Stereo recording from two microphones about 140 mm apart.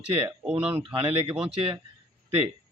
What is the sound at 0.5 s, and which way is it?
Speech, 40° right (ahead or behind).